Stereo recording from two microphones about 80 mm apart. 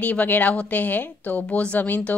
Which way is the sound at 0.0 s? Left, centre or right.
Centre.